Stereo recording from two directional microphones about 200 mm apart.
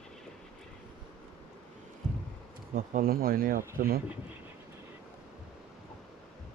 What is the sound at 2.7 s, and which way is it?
Speech, 45° right (ahead or behind).